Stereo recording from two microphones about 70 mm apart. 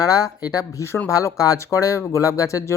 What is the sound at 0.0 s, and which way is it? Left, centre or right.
Speech, left.